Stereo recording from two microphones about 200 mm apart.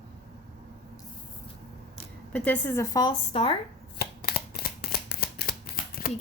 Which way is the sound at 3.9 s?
50° left (ahead or behind).